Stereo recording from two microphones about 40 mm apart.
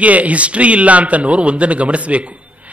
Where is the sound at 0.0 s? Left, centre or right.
Right.